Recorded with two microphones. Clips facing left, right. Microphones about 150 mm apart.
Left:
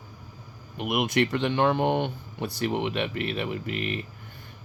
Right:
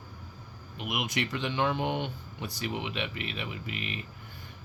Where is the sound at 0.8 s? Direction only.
55° left (ahead or behind).